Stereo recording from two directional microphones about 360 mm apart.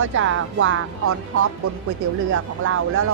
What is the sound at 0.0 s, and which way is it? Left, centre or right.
Speech, right.